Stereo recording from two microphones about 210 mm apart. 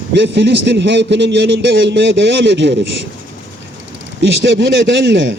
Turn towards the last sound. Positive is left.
turn(degrees=-55)  # may be behind; listen again after turning